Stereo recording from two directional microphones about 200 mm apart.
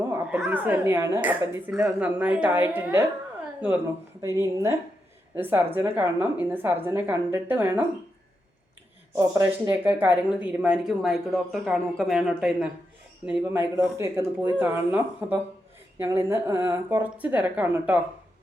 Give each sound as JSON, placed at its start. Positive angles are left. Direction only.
{"t": 0.1, "sound": "a woman's voice", "side_deg": -5}
{"t": 4.2, "sound": "a woman's voice", "side_deg": -15}
{"t": 9.1, "sound": "a woman's voice", "side_deg": -15}